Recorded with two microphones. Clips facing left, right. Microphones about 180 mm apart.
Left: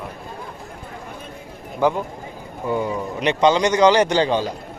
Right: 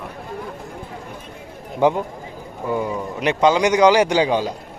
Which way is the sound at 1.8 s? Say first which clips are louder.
Right 2 dB; 20° right (ahead or behind).